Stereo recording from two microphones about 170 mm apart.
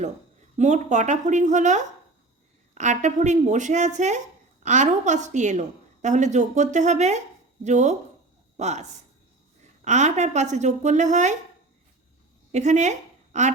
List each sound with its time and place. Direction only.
0.5 s a woman's voice: 45° right (ahead or behind)
12.5 s a woman's voice: 45° right (ahead or behind)